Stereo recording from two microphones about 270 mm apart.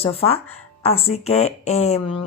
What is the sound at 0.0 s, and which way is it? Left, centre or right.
Speech, left.